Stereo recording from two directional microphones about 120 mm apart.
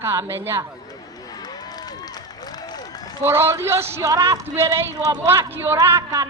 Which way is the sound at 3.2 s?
20° right (ahead or behind).